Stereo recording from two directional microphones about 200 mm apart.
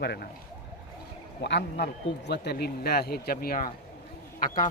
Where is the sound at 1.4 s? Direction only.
60° left (ahead or behind).